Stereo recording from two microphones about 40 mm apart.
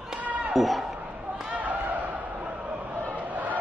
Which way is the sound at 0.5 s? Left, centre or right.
Centre.